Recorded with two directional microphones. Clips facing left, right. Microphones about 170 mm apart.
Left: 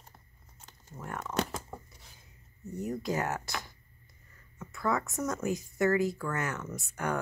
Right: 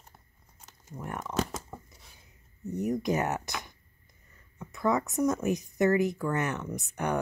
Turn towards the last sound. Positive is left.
turn(degrees=-20)  # may be behind; listen again after turning